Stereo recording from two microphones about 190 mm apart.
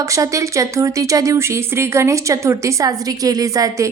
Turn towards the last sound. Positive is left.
turn(degrees=-15)  # may be behind; listen again after turning